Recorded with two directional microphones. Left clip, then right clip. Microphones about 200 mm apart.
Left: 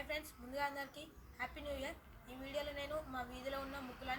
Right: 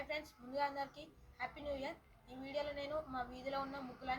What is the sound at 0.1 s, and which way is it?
A woman's voice, 5° left (ahead or behind).